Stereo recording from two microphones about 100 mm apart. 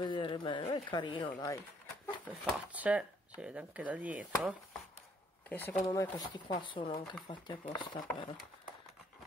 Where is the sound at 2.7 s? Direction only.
15° right (ahead or behind).